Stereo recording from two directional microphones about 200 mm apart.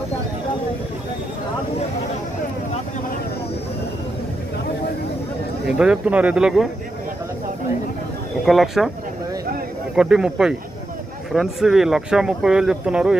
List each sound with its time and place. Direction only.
5.7 s speech: 5° right (ahead or behind)
8.5 s speech: centre (ahead or behind)
9.9 s speech: 5° right (ahead or behind)